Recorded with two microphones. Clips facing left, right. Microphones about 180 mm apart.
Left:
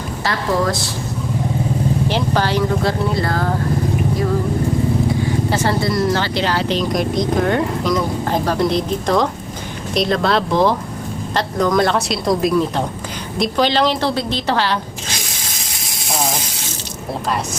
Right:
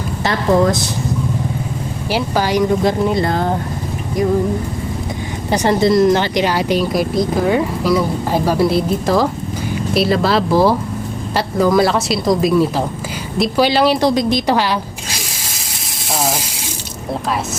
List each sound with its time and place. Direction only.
0.3 s a woman's voice: 20° right (ahead or behind)
2.0 s speech: 10° right (ahead or behind)
5.5 s a woman's voice: 20° right (ahead or behind)
16.0 s sizzle: centre (ahead or behind)